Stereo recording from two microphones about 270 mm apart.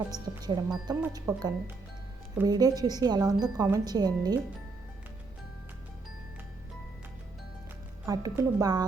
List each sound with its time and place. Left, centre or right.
0.1 s speech: centre
8.0 s speech: centre